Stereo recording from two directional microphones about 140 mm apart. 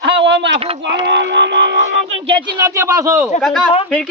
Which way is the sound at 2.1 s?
40° right (ahead or behind).